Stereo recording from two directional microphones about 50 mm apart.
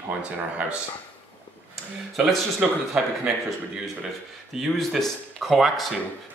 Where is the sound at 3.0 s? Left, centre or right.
Right.